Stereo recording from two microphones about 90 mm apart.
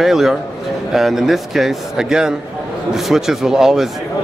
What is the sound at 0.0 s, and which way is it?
Speech, 5° right (ahead or behind).